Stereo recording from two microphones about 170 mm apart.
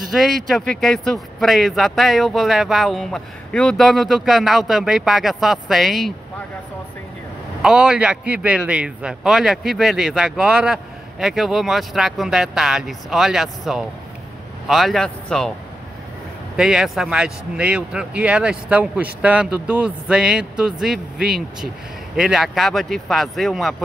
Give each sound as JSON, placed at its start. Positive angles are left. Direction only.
{"t": 0.1, "sound": "a man's voice", "side_deg": 0}
{"t": 7.6, "sound": "a man's voice", "side_deg": -5}
{"t": 16.5, "sound": "a man's voice", "side_deg": -5}